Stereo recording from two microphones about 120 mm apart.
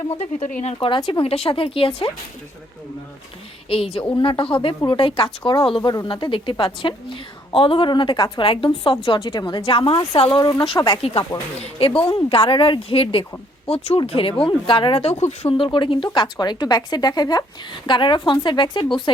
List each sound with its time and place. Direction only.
0.2 s speech: 65° left (ahead or behind)
0.6 s a woman's voice: 55° left (ahead or behind)
3.7 s a woman's voice: 50° left (ahead or behind)
5.4 s a woman's voice: 30° left (ahead or behind)
5.6 s a woman's voice: 45° left (ahead or behind)
9.0 s a woman's voice: 30° left (ahead or behind)
9.6 s a woman's voice: 45° left (ahead or behind)
10.4 s speech: 30° left (ahead or behind)
11.0 s a woman's voice: 50° left (ahead or behind)
15.2 s speech: 70° left (ahead or behind)
15.5 s a woman's voice: 45° left (ahead or behind)